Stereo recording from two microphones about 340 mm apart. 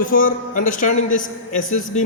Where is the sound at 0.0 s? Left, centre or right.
Left.